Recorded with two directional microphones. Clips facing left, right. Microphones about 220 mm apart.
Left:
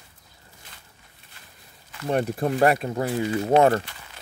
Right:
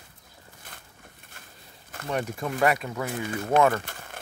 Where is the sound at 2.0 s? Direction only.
40° left (ahead or behind).